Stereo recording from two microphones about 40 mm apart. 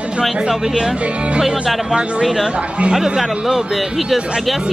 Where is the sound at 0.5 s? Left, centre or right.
Centre.